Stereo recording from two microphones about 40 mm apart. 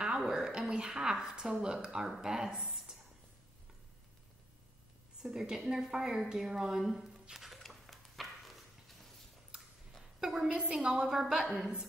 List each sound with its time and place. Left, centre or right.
0.2 s a woman's voice: centre
5.2 s a woman's voice: centre
6.8 s speech: centre
7.3 s a sound: centre
9.5 s a sound: right
10.2 s a woman's voice: centre
10.5 s a woman's voice: right